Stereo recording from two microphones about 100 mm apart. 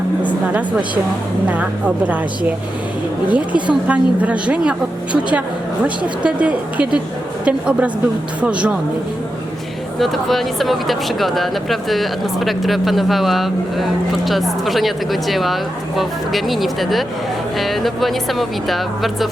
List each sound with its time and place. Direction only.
1.5 s a woman's voice: 15° right (ahead or behind)
3.2 s a woman's voice: 10° right (ahead or behind)
10.0 s speech: centre (ahead or behind)